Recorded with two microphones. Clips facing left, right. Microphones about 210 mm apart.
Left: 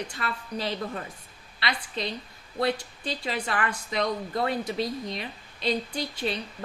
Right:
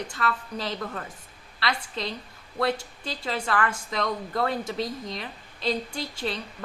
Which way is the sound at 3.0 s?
20° left (ahead or behind).